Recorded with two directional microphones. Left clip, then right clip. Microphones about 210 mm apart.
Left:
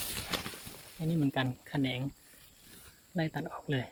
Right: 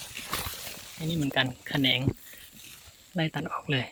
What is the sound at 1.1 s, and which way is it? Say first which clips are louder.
Speech: right 5 dB; centre (ahead or behind).